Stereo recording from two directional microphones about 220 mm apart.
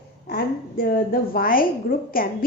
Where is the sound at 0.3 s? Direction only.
45° left (ahead or behind).